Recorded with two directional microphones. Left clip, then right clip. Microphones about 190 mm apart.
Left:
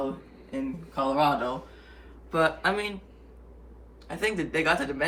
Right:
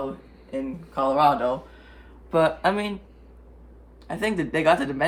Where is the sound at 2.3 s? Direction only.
55° right (ahead or behind).